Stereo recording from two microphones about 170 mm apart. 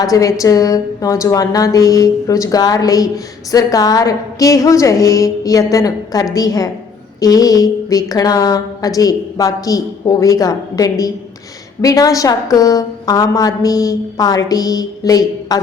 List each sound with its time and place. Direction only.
0.0 s a woman's voice: 20° left (ahead or behind)